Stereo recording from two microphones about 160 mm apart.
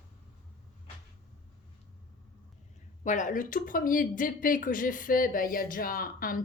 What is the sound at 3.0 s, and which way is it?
Speech, 50° left (ahead or behind).